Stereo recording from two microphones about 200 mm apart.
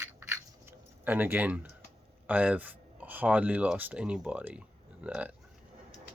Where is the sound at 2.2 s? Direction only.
5° right (ahead or behind).